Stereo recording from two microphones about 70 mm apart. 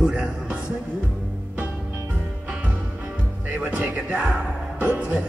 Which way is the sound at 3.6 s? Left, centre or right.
Right.